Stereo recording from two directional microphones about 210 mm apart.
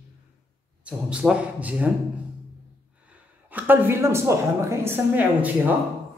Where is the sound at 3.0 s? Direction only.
10° right (ahead or behind).